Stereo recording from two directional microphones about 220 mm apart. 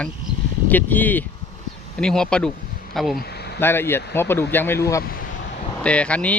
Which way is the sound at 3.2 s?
50° left (ahead or behind).